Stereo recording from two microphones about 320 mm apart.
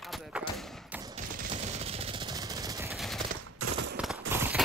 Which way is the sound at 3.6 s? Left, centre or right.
Right.